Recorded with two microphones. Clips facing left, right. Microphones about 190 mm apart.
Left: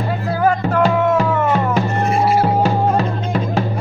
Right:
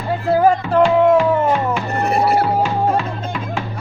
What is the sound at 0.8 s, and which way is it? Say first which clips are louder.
Music: right 4 dB; 40° left (ahead or behind).